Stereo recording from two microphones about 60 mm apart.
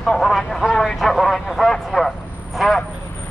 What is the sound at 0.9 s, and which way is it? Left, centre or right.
Speech, centre.